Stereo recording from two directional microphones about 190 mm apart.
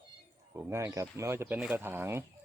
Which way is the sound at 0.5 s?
15° right (ahead or behind).